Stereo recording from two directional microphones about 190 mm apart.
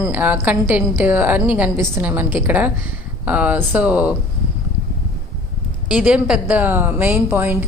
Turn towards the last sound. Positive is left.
turn(degrees=-10)  # may be behind; listen again after turning